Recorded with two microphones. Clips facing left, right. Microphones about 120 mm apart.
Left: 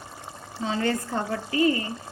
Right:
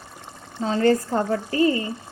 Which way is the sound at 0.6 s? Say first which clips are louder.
Right 7 dB; 40° right (ahead or behind).